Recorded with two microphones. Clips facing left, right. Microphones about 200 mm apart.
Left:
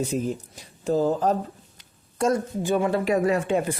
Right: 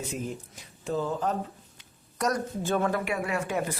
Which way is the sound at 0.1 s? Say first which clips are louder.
Left 8 dB; 35° left (ahead or behind).